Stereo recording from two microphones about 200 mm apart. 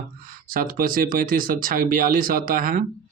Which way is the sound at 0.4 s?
45° right (ahead or behind).